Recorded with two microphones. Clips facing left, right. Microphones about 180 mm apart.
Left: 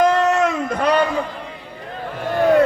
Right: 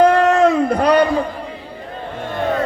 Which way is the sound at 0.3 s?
30° right (ahead or behind).